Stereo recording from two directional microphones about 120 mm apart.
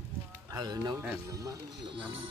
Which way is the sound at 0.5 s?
35° right (ahead or behind).